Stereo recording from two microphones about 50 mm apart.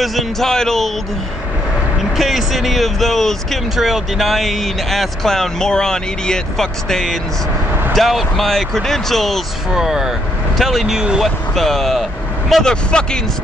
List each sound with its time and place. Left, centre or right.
0.0 s speech: centre
2.1 s speech: centre
3.7 s speech: centre
9.8 s speech: centre
12.6 s speech: centre